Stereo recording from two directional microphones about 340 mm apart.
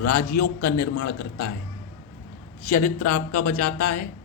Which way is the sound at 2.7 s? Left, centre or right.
Left.